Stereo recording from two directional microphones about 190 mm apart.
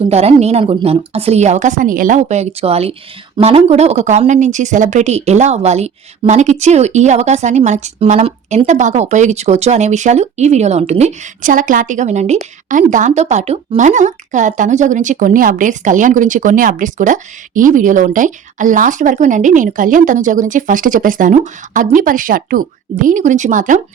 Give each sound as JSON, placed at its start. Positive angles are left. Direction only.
{"t": 0.1, "sound": "speech", "side_deg": -35}